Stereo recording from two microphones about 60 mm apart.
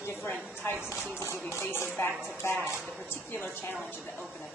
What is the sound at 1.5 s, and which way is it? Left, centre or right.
A woman's voice, left.